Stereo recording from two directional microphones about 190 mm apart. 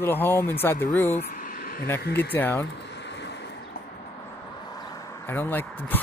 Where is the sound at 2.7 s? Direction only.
65° left (ahead or behind).